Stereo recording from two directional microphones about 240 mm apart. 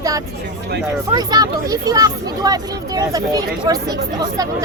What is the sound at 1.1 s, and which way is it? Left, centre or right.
Speech, centre.